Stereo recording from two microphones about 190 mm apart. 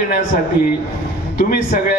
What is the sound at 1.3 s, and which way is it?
Speech, 50° left (ahead or behind).